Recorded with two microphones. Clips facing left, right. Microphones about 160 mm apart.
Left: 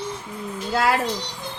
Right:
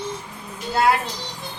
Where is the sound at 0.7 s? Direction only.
90° left.